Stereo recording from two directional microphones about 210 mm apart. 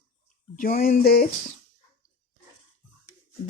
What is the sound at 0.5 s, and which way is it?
Speech, 40° left (ahead or behind).